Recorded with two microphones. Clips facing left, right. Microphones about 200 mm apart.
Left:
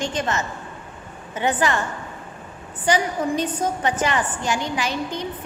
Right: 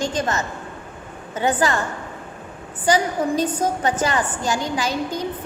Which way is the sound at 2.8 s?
40° right (ahead or behind).